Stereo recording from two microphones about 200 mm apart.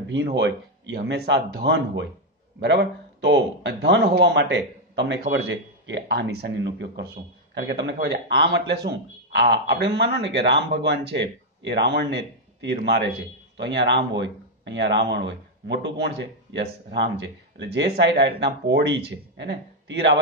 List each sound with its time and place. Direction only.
0.1 s a man's voice: 60° right (ahead or behind)